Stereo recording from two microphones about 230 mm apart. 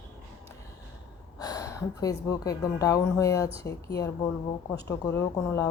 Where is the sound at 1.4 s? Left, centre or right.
Centre.